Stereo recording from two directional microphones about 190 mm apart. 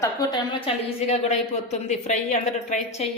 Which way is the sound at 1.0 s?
35° left (ahead or behind).